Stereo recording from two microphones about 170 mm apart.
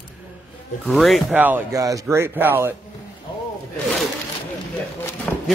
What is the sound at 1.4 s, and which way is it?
Speech, 15° right (ahead or behind).